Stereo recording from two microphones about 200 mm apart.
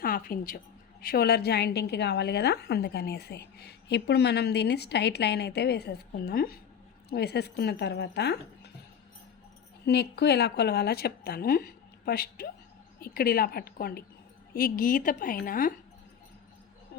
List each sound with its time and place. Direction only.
0.0 s a woman's voice: 45° left (ahead or behind)
9.8 s a woman's voice: 55° left (ahead or behind)